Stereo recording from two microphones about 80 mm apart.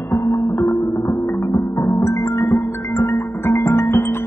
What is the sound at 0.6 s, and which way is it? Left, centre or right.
Music, left.